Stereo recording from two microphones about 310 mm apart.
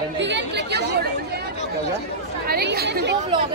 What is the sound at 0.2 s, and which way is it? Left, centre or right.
Chatter, right.